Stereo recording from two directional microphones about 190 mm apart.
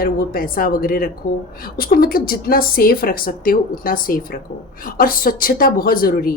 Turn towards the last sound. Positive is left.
turn(degrees=50)  # may be behind; listen again after turning